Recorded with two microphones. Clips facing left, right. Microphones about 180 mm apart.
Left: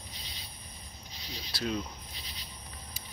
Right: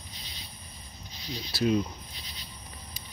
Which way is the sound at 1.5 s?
10° right (ahead or behind).